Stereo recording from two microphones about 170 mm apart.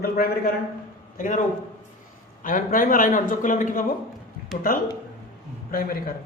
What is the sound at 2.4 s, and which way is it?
Speech, 55° left (ahead or behind).